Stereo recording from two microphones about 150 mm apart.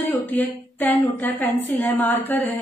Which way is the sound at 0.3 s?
10° left (ahead or behind).